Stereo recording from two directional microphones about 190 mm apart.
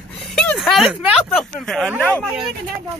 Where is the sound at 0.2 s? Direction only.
Centre (ahead or behind).